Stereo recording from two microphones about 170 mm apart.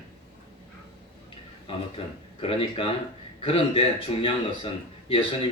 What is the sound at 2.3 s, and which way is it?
A man's voice, 30° left (ahead or behind).